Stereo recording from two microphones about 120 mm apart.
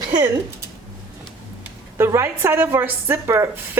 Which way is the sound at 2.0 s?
20° right (ahead or behind).